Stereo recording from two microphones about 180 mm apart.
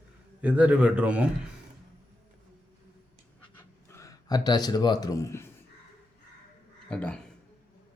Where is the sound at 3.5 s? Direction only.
15° left (ahead or behind).